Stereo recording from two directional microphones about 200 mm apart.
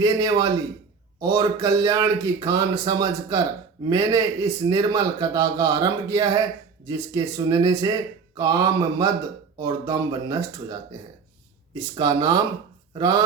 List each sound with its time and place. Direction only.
0.0 s a man's voice: 20° right (ahead or behind)